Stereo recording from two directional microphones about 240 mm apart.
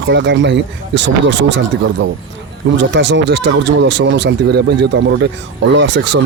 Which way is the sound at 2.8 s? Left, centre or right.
Right.